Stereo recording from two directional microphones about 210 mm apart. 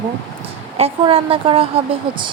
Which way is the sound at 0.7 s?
30° right (ahead or behind).